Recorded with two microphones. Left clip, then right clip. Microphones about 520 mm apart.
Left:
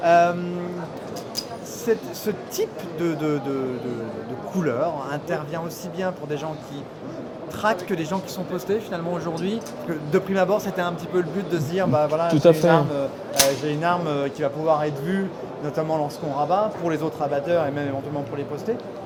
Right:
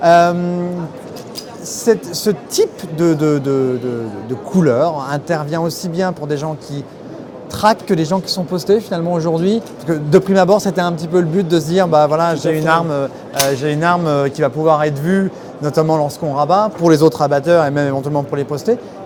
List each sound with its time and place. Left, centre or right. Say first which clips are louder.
0.0 s a sound: right 7 dB; right
1.8 s speech: right 10 dB; right
7.6 s a man's voice: right 10 dB; right